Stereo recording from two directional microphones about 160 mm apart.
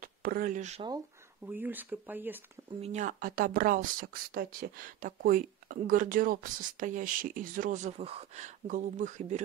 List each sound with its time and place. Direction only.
0.0 s a sound: 65° right (ahead or behind)
0.6 s speech: 45° right (ahead or behind)
1.4 s speech: 10° right (ahead or behind)
2.8 s speech: 50° right (ahead or behind)